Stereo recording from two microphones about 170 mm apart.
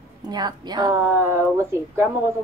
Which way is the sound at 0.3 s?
25° right (ahead or behind).